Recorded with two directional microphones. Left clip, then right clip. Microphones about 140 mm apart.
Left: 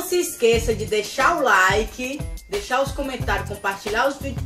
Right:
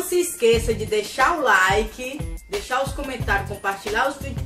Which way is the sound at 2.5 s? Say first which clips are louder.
Left 2 dB; centre (ahead or behind).